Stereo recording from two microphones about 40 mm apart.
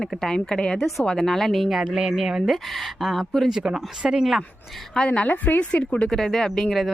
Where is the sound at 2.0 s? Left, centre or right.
Centre.